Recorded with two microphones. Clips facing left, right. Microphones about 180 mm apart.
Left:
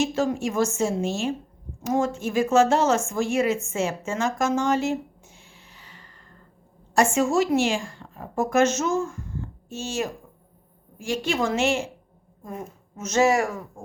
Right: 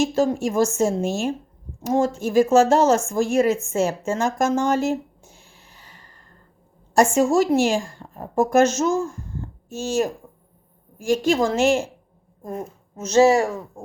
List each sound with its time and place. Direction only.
0.0 s a woman's voice: 35° right (ahead or behind)